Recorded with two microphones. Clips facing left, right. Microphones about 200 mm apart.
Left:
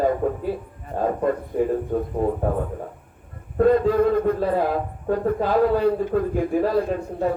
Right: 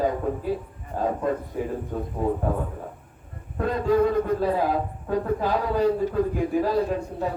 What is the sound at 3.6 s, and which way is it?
A man's voice, 55° left (ahead or behind).